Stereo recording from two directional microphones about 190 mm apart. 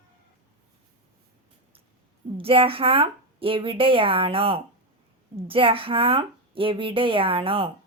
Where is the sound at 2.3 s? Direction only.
30° right (ahead or behind).